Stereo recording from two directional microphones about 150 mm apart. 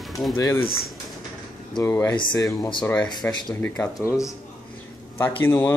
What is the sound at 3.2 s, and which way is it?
Speech, 25° left (ahead or behind).